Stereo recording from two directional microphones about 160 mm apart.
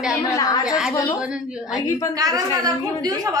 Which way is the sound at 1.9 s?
20° left (ahead or behind).